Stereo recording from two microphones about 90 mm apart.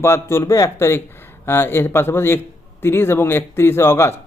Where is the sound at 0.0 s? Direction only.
30° left (ahead or behind).